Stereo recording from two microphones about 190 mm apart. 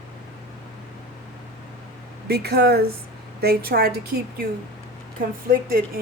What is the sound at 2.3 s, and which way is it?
A woman's voice, 55° right (ahead or behind).